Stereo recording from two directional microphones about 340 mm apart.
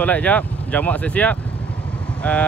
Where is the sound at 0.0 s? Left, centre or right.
Centre.